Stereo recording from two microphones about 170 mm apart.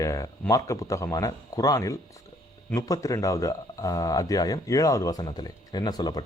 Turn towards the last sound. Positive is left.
turn(degrees=25)  # may be behind; listen again after turning